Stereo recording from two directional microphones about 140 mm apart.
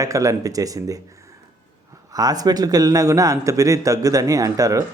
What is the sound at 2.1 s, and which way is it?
Speech, 25° right (ahead or behind).